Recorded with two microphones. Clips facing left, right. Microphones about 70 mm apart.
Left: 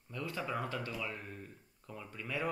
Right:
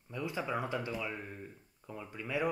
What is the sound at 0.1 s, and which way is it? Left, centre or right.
Speech, centre.